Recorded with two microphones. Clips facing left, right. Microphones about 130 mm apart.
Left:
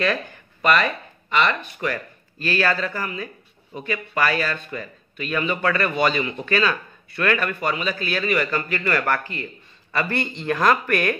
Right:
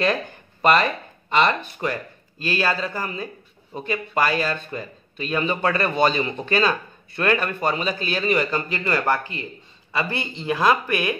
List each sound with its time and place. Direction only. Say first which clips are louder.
0.0 s a sound: right 1 dB; 30° right (ahead or behind)
1.3 s speech: right 2 dB; 30° right (ahead or behind)
2.9 s a man's voice: even; 35° right (ahead or behind); by 11.1 s 15° right (ahead or behind)